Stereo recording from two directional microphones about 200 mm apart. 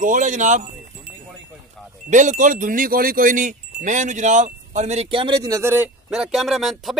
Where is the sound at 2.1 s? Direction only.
40° right (ahead or behind).